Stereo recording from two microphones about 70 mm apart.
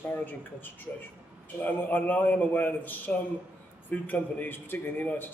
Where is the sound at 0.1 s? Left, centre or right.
Left.